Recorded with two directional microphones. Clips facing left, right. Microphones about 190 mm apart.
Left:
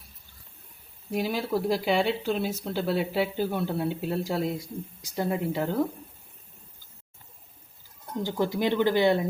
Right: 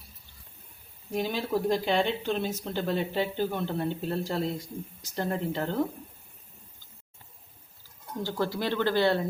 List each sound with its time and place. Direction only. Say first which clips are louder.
1.1 s speech: left 1 dB; 10° left (ahead or behind)
8.2 s speech: left 3 dB; 15° left (ahead or behind)